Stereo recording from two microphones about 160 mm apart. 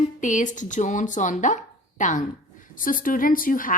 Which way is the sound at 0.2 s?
50° left (ahead or behind).